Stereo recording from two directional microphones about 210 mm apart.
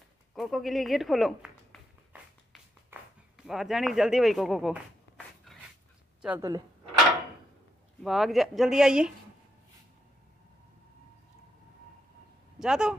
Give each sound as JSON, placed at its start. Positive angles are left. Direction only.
{"t": 0.3, "sound": "speech", "side_deg": 0}
{"t": 2.5, "sound": "a sound", "side_deg": 0}
{"t": 6.2, "sound": "speech", "side_deg": -10}
{"t": 8.0, "sound": "speech", "side_deg": 0}
{"t": 12.5, "sound": "speech", "side_deg": -5}